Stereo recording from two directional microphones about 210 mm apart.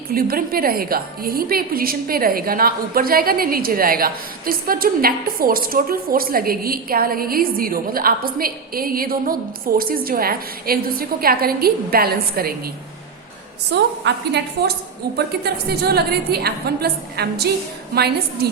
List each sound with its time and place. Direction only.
0.1 s a woman's voice: 45° right (ahead or behind)